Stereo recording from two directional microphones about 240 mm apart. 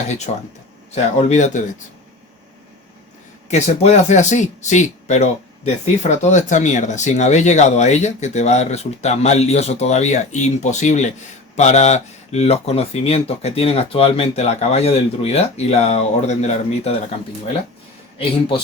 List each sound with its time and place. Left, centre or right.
0.3 s speech: left
3.5 s speech: left
18.2 s speech: left